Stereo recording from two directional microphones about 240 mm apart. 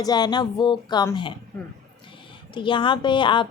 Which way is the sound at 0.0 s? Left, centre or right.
Centre.